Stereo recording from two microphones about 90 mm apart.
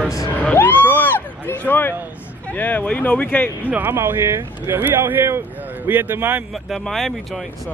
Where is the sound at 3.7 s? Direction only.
25° right (ahead or behind).